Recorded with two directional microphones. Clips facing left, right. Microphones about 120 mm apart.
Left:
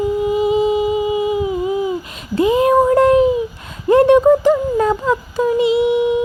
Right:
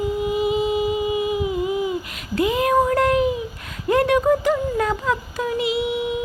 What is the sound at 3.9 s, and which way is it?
Speech, 25° left (ahead or behind).